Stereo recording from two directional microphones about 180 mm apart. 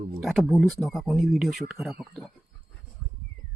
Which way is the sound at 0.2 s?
Centre (ahead or behind).